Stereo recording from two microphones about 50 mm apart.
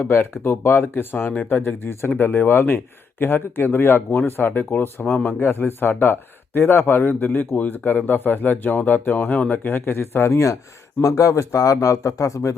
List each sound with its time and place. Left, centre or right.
0.0 s speech: left
5.0 s speech: left
5.4 s speech: left
9.6 s speech: left